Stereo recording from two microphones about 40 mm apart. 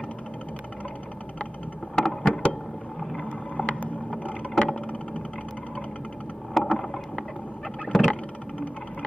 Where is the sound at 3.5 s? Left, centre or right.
Left.